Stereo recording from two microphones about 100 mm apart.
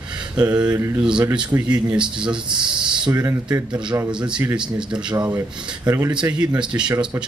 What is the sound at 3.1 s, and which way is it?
Speech, 35° right (ahead or behind).